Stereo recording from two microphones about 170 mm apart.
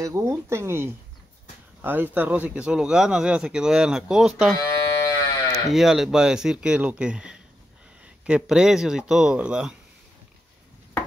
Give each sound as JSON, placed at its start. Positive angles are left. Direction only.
{"t": 0.0, "sound": "speech", "side_deg": -15}
{"t": 4.6, "sound": "a sound", "side_deg": 20}
{"t": 5.7, "sound": "speech", "side_deg": 0}